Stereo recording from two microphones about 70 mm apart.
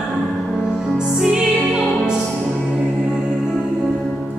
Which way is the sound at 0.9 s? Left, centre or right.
Centre.